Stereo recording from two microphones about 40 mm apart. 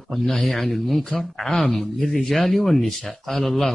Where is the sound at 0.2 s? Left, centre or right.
Centre.